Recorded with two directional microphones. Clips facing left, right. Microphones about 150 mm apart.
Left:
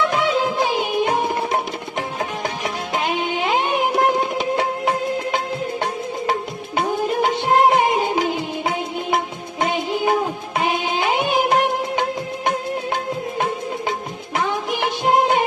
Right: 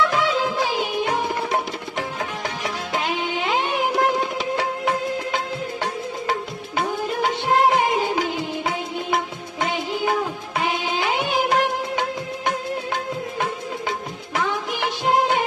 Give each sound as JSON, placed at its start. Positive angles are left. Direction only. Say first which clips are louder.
{"t": 0.0, "sound": "music", "louder": "left 2 dB", "side_deg": 20}
{"t": 6.7, "sound": "music of bollywood", "louder": "left 4 dB", "side_deg": 20}
{"t": 14.3, "sound": "music of bollywood", "louder": "left 2 dB", "side_deg": 20}